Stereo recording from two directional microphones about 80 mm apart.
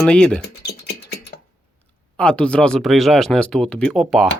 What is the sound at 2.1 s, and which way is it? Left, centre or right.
Speech, centre.